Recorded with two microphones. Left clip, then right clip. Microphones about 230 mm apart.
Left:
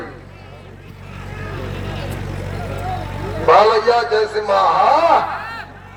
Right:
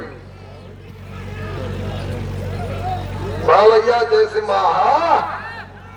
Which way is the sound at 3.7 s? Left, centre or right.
Centre.